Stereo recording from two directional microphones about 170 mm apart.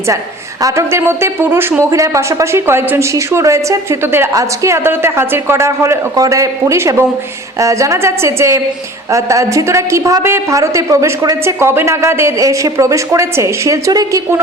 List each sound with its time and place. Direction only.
0.6 s a woman's voice: 15° right (ahead or behind)